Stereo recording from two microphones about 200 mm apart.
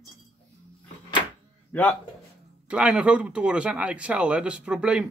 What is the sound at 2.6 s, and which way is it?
Speech, 5° right (ahead or behind).